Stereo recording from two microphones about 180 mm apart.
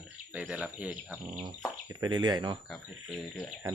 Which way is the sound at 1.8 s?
25° right (ahead or behind).